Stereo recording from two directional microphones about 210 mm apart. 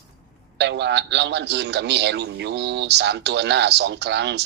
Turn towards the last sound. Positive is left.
turn(degrees=-55)  # may be behind; listen again after turning